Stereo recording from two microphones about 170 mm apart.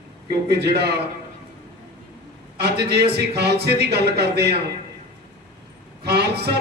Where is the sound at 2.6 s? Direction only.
75° right (ahead or behind).